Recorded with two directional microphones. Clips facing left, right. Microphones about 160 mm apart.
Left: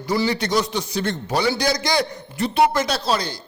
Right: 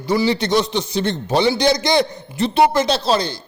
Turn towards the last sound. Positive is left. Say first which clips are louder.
# right 4 dB
turn(degrees=-25)  # may be behind; listen again after turning